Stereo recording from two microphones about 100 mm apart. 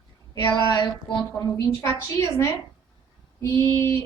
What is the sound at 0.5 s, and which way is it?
Speech, 45° left (ahead or behind).